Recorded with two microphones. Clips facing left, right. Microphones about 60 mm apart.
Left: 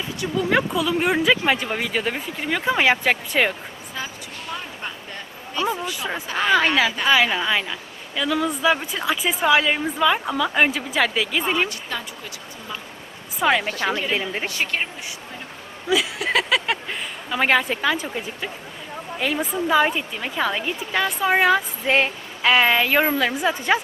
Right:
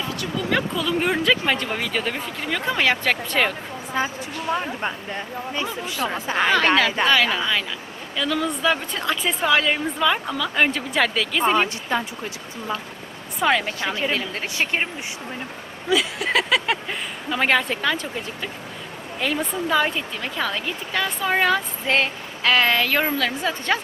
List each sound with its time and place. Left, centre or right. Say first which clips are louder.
0.2 s a woman's voice: left 4 dB; centre
4.0 s a woman's voice: right 7 dB; right
7.0 s a woman's voice: even; centre
11.9 s speech: right 6 dB; right
13.4 s speech: even; centre
14.1 s a woman's voice: left 1 dB; centre
15.9 s a sound: even; centre
19.2 s a woman's voice: left 1 dB; centre